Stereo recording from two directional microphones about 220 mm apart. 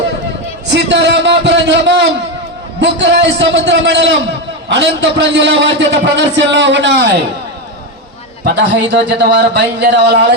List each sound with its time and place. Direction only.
0.7 s a sound: 50° right (ahead or behind)
2.8 s a man's voice: 50° right (ahead or behind)
8.4 s a man's voice: 50° right (ahead or behind)